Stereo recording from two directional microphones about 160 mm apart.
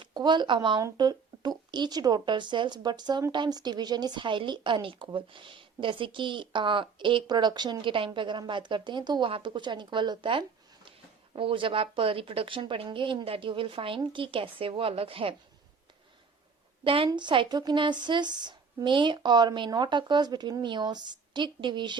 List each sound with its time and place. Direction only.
0.0 s speech: 25° right (ahead or behind)
16.8 s speech: 35° right (ahead or behind)